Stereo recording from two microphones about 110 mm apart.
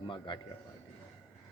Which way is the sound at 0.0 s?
45° left (ahead or behind).